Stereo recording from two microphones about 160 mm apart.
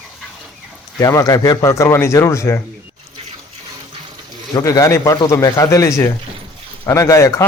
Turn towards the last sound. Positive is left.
turn(degrees=20)  # may be behind; listen again after turning